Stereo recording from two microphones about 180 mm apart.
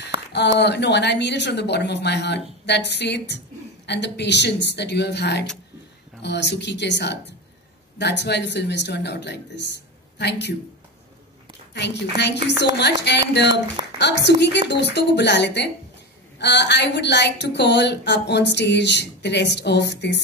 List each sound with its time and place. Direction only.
0.3 s a woman's voice: 70° left (ahead or behind)
11.7 s a woman's voice: 70° left (ahead or behind)